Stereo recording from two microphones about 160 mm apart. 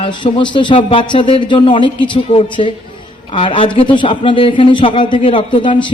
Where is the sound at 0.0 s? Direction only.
30° left (ahead or behind).